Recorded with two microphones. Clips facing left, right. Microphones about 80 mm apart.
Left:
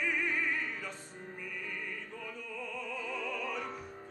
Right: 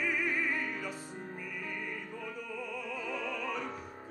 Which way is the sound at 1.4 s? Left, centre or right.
Centre.